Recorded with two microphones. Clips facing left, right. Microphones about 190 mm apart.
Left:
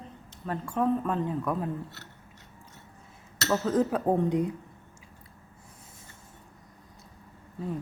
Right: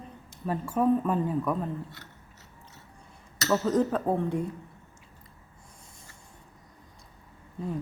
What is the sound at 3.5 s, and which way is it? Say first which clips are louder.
Speech: right 1 dB; 5° left (ahead or behind).